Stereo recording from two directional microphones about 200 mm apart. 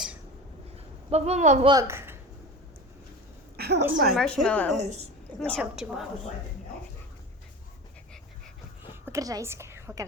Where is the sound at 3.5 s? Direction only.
55° right (ahead or behind).